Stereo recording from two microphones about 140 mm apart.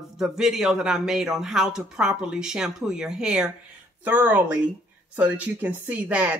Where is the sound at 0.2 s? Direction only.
5° right (ahead or behind).